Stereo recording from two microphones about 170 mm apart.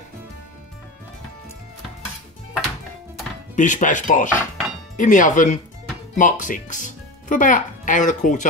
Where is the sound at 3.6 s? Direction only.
50° left (ahead or behind).